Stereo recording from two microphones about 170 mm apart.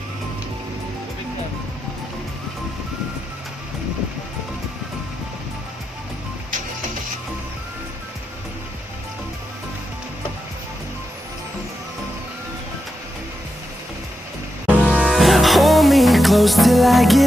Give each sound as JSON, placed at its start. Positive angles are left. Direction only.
{"t": 14.7, "sound": "music", "side_deg": 0}